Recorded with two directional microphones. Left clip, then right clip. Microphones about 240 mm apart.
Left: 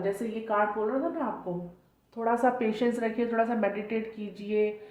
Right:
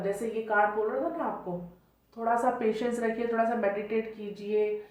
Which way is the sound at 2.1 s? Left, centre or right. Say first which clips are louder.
Left 1 dB; left.